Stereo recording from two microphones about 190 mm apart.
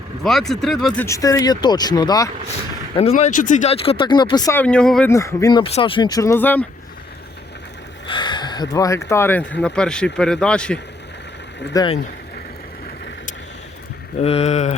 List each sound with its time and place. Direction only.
0.2 s speech: centre (ahead or behind)
1.0 s speech: 15° left (ahead or behind)
3.0 s speech: 35° left (ahead or behind)
4.5 s speech: 5° left (ahead or behind)
5.1 s speech: 15° left (ahead or behind)
8.0 s speech: 25° left (ahead or behind); by 10.8 s 5° left (ahead or behind)
11.7 s speech: 20° left (ahead or behind)
14.2 s speech: 35° left (ahead or behind)